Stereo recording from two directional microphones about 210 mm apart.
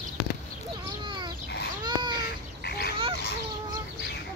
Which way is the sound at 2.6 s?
50° left (ahead or behind).